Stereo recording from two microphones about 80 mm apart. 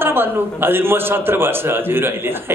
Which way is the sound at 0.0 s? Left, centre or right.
Right.